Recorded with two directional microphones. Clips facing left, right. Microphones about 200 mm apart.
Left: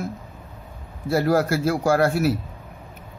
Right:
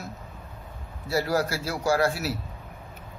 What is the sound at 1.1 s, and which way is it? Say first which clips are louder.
Speech: left 6 dB; 50° left (ahead or behind).